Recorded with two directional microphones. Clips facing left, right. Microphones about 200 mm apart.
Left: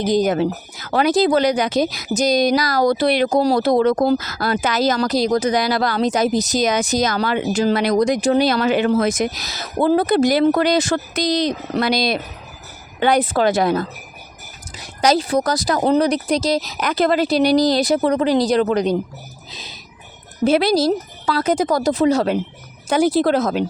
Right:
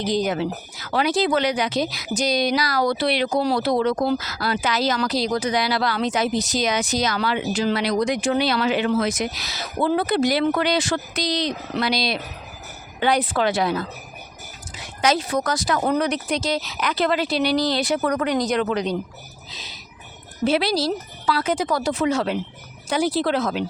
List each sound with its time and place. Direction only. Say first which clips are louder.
0.0 s speech: left 5 dB; 45° left (ahead or behind)
20.4 s speech: left 5 dB; 45° left (ahead or behind)